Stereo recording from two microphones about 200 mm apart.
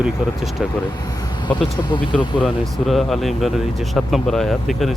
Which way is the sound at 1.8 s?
25° left (ahead or behind).